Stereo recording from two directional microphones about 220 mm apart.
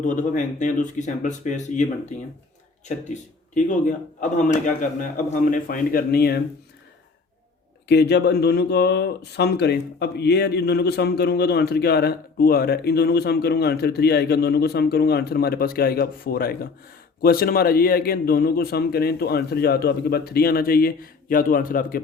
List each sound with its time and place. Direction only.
0.0 s speech: 35° left (ahead or behind)
7.9 s speech: 50° left (ahead or behind)